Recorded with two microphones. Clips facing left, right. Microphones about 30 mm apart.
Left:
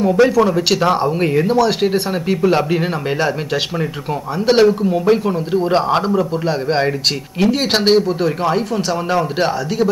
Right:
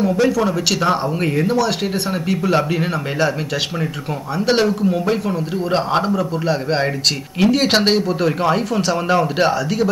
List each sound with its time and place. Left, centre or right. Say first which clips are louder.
0.1 s a man's voice: left 4 dB; centre
1.8 s speech: left 4 dB; left
4.5 s a man's voice: left 4 dB; centre
5.2 s speech: left 4 dB; left
5.7 s a man's voice: left 1 dB; centre
7.3 s speech: right 1 dB; centre